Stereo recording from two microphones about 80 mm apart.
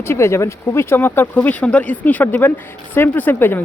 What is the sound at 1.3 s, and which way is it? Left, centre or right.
Speech, centre.